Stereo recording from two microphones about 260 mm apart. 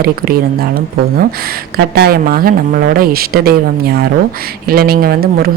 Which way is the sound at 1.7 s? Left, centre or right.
Right.